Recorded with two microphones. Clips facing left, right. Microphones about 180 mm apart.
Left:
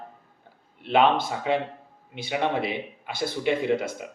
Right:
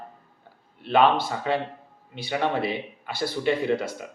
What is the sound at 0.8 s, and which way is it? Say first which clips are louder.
A man's voice: right 1 dB; 20° left (ahead or behind).